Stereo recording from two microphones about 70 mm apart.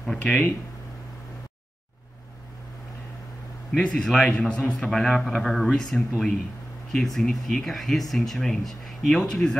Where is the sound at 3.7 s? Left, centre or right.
Centre.